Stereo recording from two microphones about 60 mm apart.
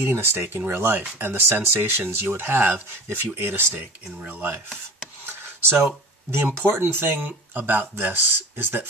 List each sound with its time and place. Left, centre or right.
0.0 s speech: right
0.5 s speech: right
5.2 s a sound: right
6.4 s speech: right